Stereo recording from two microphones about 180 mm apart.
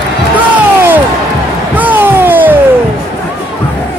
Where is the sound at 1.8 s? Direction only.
10° right (ahead or behind).